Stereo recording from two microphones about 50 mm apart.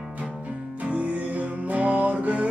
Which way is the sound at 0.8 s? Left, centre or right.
Right.